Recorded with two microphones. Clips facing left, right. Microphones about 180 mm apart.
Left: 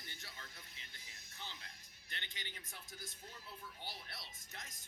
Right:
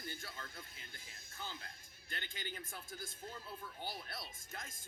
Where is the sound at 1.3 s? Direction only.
50° right (ahead or behind).